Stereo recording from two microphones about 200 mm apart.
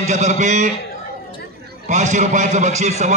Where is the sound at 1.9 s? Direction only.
35° right (ahead or behind).